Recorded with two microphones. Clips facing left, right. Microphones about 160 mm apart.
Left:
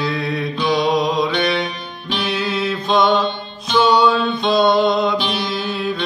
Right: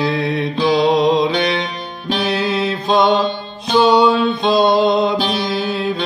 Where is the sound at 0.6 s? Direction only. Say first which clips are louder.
Right 4 dB; 25° right (ahead or behind).